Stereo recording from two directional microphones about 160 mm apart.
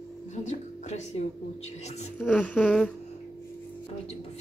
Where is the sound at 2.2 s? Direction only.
10° left (ahead or behind).